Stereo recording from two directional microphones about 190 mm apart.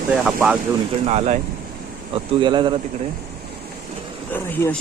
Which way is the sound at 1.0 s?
35° right (ahead or behind).